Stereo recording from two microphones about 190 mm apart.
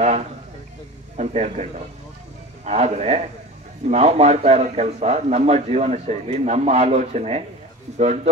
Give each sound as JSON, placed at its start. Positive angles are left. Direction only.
{"t": 1.1, "sound": "a man's voice", "side_deg": -40}